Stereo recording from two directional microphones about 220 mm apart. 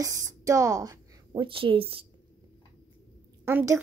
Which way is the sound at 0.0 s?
15° right (ahead or behind).